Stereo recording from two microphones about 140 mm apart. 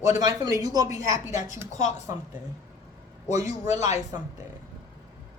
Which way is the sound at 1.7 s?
60° left (ahead or behind).